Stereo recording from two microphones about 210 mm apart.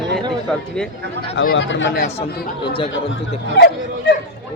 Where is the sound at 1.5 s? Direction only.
60° left (ahead or behind).